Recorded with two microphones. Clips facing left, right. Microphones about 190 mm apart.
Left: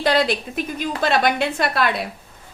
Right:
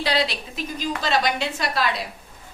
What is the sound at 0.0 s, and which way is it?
A woman's voice, 50° left (ahead or behind).